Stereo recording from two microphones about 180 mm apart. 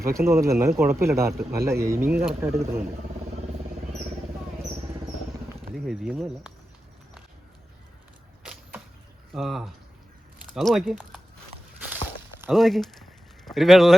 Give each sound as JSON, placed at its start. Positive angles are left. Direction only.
{"t": 0.0, "sound": "speech", "side_deg": -15}
{"t": 5.7, "sound": "speech", "side_deg": 0}
{"t": 9.3, "sound": "speech", "side_deg": 0}
{"t": 12.5, "sound": "a sound", "side_deg": 0}